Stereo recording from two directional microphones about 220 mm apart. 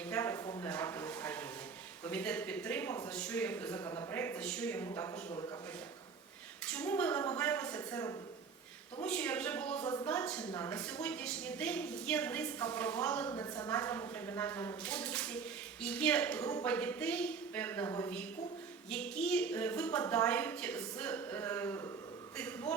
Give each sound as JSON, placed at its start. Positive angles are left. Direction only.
{"t": 0.0, "sound": "a sound", "side_deg": 10}
{"t": 0.7, "sound": "a woman's voice", "side_deg": 10}
{"t": 6.7, "sound": "a woman's voice", "side_deg": 5}